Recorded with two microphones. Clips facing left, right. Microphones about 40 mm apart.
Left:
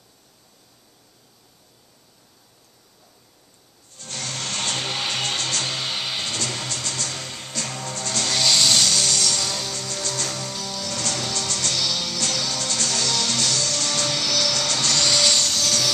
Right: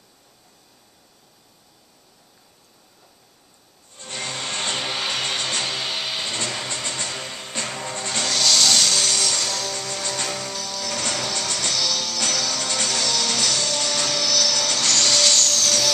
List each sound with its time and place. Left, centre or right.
3.9 s music: right; by 5.2 s centre
5.2 s music: right
5.7 s music: centre
6.2 s music: right
8.3 s vehicle: centre
8.8 s music: centre; by 10.5 s right
10.5 s music: centre
10.9 s music: right
11.7 s music: centre
12.5 s music: right
13.0 s music: centre
13.3 s music: right
14.0 s music: centre
14.9 s vacuum cleaner: centre